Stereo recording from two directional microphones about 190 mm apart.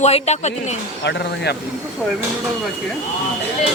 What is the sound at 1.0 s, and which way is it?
Speech, 60° left (ahead or behind).